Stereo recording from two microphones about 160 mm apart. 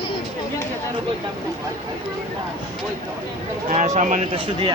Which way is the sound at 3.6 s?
50° right (ahead or behind).